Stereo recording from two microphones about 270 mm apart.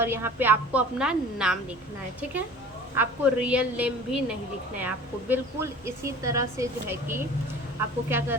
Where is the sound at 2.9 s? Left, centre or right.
Centre.